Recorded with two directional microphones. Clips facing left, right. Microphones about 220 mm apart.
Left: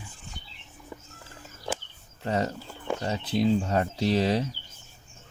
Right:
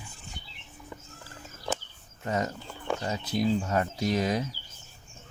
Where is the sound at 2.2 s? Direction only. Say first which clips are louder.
Left 2 dB; 30° left (ahead or behind).